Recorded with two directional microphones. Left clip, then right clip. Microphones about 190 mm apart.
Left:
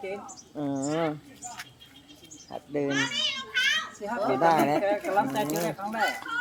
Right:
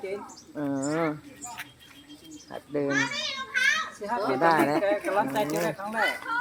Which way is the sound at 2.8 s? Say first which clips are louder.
Right 2 dB; 50° left (ahead or behind).